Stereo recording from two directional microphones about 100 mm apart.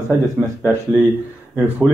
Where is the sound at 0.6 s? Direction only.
20° right (ahead or behind).